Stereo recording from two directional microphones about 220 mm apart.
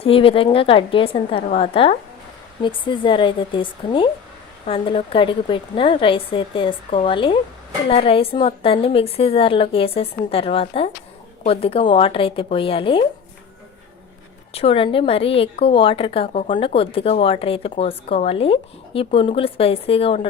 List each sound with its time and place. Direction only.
0.0 s a woman's voice: 25° left (ahead or behind)
14.5 s a woman's voice: 25° left (ahead or behind)